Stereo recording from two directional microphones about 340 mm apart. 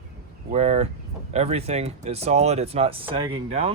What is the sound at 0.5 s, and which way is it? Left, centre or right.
A man's voice, centre.